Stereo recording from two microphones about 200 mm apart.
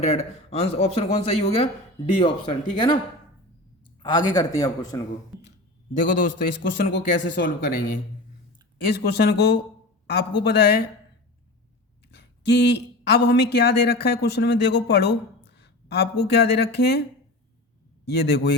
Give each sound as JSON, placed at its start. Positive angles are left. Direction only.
{"t": 0.0, "sound": "a man's voice", "side_deg": 30}
{"t": 4.0, "sound": "a man's voice", "side_deg": 20}
{"t": 5.9, "sound": "speech", "side_deg": 40}
{"t": 6.9, "sound": "speech", "side_deg": 65}
{"t": 9.0, "sound": "speech", "side_deg": 55}
{"t": 12.1, "sound": "a sound", "side_deg": 60}
{"t": 13.2, "sound": "speech", "side_deg": 55}
{"t": 18.1, "sound": "speech", "side_deg": 55}